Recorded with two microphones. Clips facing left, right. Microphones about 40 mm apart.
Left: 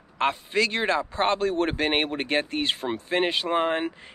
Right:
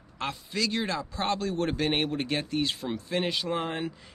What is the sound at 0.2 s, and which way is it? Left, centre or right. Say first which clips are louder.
Speech: left 7 dB; left.